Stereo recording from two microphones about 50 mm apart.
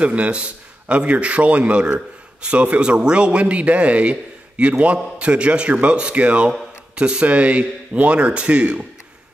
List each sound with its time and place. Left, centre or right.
0.0 s a man's voice: right